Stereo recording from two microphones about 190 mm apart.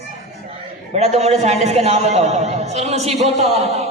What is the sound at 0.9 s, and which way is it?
A man's voice, 35° right (ahead or behind).